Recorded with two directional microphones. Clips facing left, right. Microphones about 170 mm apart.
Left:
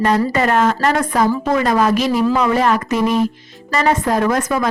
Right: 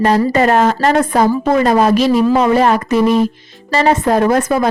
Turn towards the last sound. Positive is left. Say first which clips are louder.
# right 4 dB
turn(degrees=-30)  # may be behind; listen again after turning